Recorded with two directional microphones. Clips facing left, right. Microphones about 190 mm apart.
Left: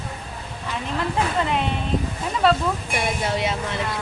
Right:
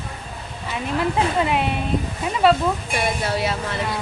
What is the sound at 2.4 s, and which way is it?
Speech, centre (ahead or behind).